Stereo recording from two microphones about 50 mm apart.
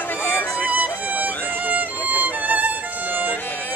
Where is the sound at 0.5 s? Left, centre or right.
Right.